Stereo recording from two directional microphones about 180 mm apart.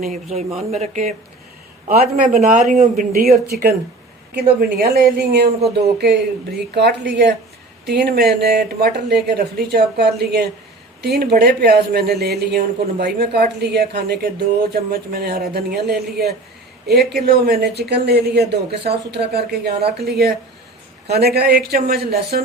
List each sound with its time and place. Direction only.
0.0 s speech: 40° right (ahead or behind)
1.9 s speech: 50° right (ahead or behind)
6.7 s a woman's voice: 70° right (ahead or behind)